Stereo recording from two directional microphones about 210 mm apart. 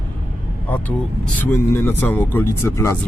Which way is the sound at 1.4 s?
10° left (ahead or behind).